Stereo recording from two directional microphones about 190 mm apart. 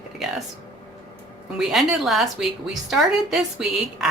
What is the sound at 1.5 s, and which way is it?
A woman's voice, centre (ahead or behind).